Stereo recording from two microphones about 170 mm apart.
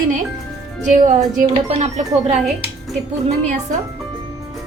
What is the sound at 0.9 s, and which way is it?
Speech, 45° right (ahead or behind).